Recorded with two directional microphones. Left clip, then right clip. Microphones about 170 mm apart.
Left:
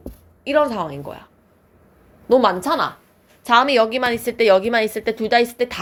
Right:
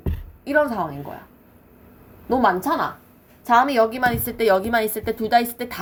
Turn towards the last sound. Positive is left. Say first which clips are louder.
# left 2 dB
turn(degrees=35)  # may be behind; listen again after turning